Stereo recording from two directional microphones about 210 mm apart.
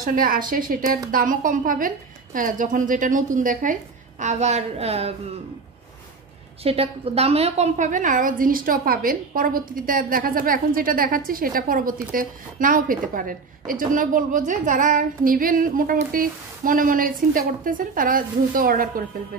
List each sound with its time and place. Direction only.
0.0 s a woman's voice: 40° right (ahead or behind)
6.6 s a woman's voice: 30° right (ahead or behind)